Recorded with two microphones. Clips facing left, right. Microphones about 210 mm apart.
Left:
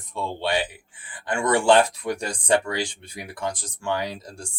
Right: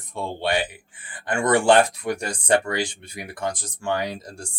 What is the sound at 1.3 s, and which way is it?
Speech, 50° right (ahead or behind).